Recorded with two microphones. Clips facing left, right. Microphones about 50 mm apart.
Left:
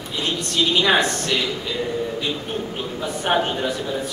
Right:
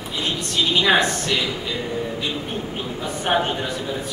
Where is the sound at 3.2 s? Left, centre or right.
Centre.